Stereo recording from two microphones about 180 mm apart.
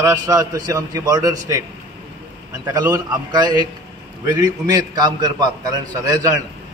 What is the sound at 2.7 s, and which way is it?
A man's voice, 20° right (ahead or behind).